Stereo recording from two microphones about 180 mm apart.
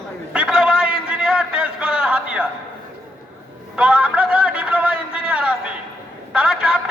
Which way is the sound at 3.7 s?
5° right (ahead or behind).